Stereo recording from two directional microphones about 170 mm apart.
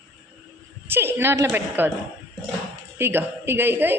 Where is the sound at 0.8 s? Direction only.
15° right (ahead or behind).